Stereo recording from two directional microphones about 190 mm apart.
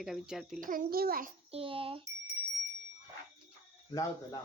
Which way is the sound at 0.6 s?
45° right (ahead or behind).